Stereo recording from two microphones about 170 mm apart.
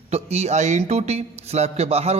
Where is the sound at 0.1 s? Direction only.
40° right (ahead or behind).